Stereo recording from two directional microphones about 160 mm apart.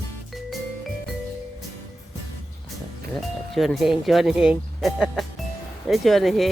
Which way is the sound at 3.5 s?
Centre (ahead or behind).